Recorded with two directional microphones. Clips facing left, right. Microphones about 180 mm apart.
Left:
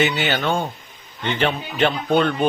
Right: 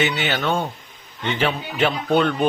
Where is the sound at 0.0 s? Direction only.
Centre (ahead or behind).